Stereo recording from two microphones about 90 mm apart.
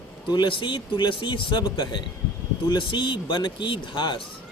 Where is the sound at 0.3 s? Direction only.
65° left (ahead or behind).